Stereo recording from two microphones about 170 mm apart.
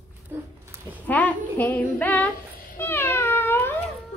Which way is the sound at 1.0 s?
10° left (ahead or behind).